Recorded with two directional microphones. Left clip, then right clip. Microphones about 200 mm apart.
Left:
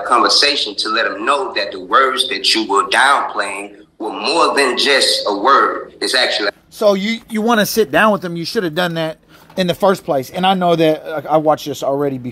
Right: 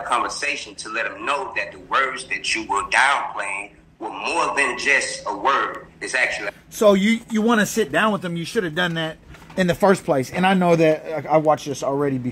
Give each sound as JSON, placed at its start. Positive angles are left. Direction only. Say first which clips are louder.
{"t": 0.0, "sound": "a man's voice", "louder": "left 10 dB", "side_deg": 0}
{"t": 7.3, "sound": "a man's voice", "louder": "left 7 dB", "side_deg": 25}
{"t": 9.8, "sound": "a man's voice", "louder": "left 3 dB", "side_deg": 0}
{"t": 11.5, "sound": "a man's voice", "louder": "left 4 dB", "side_deg": 20}